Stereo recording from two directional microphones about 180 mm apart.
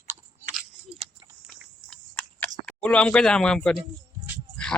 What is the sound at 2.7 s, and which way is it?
Speech, 5° left (ahead or behind).